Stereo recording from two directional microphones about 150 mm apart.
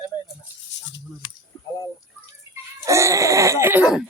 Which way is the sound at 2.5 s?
20° right (ahead or behind).